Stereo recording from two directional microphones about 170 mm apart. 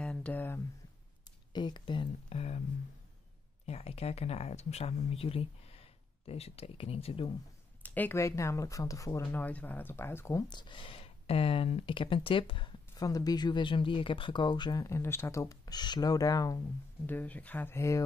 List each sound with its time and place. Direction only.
0.0 s a sound: 5° left (ahead or behind)
1.5 s speech: 25° left (ahead or behind)
3.6 s speech: 35° left (ahead or behind)
7.8 s speech: 10° left (ahead or behind)
10.5 s speech: 25° left (ahead or behind)